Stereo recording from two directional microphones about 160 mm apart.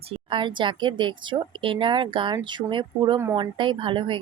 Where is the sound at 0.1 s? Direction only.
30° right (ahead or behind).